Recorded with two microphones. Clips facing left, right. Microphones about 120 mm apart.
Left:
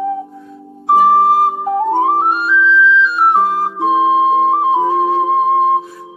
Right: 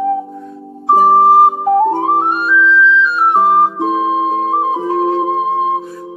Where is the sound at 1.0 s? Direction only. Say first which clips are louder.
Right 3 dB; 30° right (ahead or behind).